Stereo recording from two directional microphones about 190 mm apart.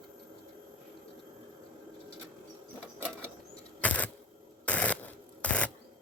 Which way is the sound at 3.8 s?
10° left (ahead or behind).